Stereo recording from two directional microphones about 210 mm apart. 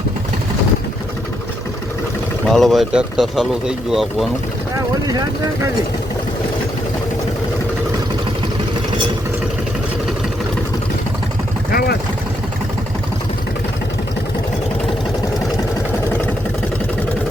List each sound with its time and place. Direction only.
2.5 s speech: centre (ahead or behind)
11.7 s vehicle: 45° left (ahead or behind)